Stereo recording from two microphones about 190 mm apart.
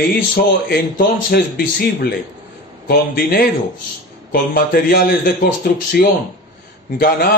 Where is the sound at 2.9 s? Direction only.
50° left (ahead or behind).